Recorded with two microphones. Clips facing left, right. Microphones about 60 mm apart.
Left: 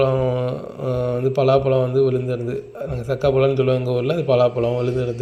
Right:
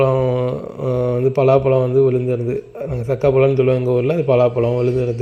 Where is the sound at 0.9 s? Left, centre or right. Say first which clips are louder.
Right 4 dB; right.